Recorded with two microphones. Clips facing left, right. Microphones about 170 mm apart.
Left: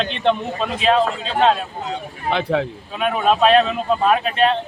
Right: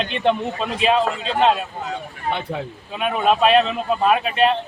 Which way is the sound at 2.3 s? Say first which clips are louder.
Left 7 dB; 90° left.